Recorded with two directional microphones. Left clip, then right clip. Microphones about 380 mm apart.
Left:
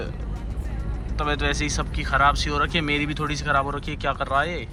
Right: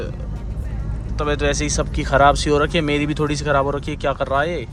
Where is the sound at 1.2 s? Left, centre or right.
Centre.